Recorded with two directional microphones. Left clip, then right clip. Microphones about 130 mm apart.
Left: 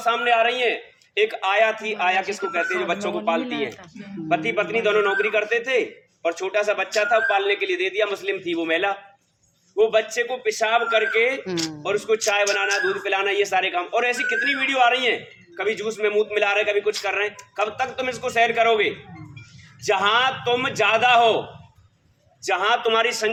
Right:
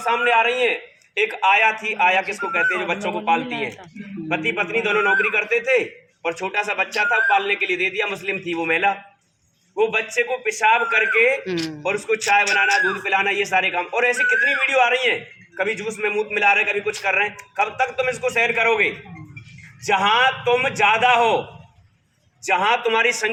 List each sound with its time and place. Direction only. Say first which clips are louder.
0.0 s a man's voice: right 1 dB; 25° left (ahead or behind)
4.3 s a man's voice: even; 25° left (ahead or behind)
19.9 s a man's voice: right 2 dB; 20° left (ahead or behind)
22.4 s a man's voice: right 2 dB; 20° left (ahead or behind)